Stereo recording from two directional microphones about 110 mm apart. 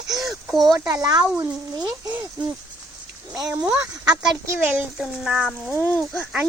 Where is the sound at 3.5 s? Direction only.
15° right (ahead or behind).